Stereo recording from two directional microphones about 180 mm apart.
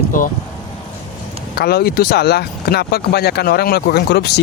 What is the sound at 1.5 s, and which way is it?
Speech, 60° left (ahead or behind).